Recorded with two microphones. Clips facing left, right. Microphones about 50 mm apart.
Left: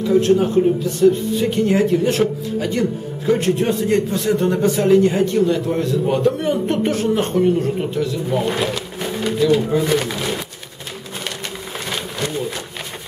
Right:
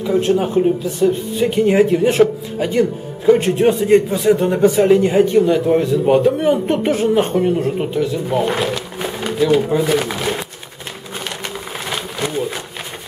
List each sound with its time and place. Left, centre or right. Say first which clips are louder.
0.0 s a man's voice: left 1 dB; centre
10.0 s pigeon: right 2 dB; centre
11.9 s a sound: right 2 dB; centre